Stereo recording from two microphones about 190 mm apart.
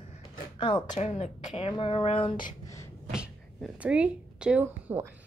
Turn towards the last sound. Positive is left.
turn(degrees=-10)  # may be behind; listen again after turning